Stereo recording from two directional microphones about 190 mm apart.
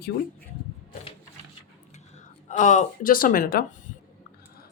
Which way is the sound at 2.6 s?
40° left (ahead or behind).